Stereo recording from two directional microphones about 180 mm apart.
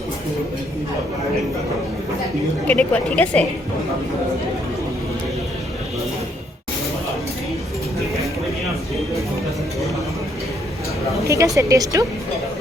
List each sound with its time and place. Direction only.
2.6 s a woman's voice: 10° left (ahead or behind)
11.2 s a woman's voice: 15° right (ahead or behind)